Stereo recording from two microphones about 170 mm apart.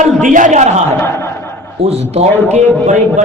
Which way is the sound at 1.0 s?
15° left (ahead or behind).